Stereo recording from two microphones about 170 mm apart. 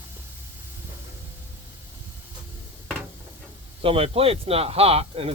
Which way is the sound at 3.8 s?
35° right (ahead or behind).